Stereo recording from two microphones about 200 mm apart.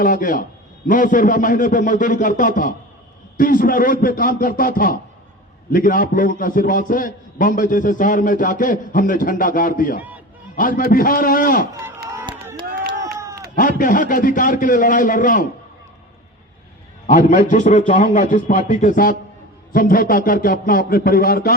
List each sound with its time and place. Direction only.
0.0 s a man's voice: 45° left (ahead or behind)
11.7 s speech: 15° right (ahead or behind)
12.0 s run: 15° right (ahead or behind)
13.1 s a sound: 15° right (ahead or behind)
13.6 s a man's voice: 45° left (ahead or behind)
17.1 s a man's voice: 40° left (ahead or behind)